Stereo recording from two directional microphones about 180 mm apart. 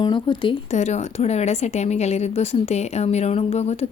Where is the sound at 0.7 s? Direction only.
40° left (ahead or behind).